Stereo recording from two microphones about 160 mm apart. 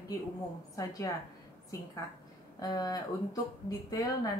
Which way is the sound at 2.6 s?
25° left (ahead or behind).